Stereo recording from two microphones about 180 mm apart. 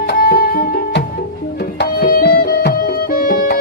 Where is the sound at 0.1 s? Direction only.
55° left (ahead or behind).